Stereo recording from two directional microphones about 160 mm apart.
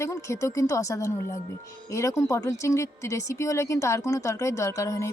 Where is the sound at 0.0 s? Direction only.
20° left (ahead or behind).